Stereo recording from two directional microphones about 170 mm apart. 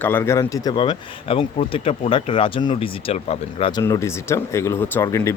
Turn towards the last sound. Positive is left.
turn(degrees=15)  # may be behind; listen again after turning